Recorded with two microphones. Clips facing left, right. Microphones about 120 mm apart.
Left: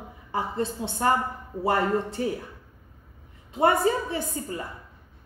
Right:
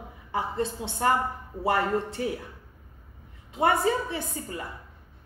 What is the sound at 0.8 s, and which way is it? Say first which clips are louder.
Speech: left 3 dB; 15° right (ahead or behind).